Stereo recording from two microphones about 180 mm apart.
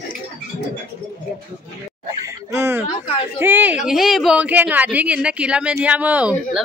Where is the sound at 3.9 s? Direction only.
Centre (ahead or behind).